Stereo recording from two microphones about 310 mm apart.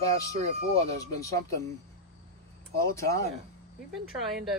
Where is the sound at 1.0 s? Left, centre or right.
Centre.